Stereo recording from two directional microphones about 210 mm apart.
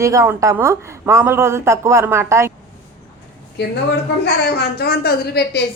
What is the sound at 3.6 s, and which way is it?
A woman's voice, 55° left (ahead or behind).